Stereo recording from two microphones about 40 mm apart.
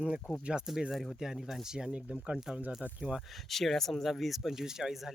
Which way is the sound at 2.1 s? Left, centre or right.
Right.